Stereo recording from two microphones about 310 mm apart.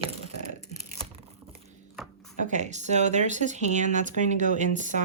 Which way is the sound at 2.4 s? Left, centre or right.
Right.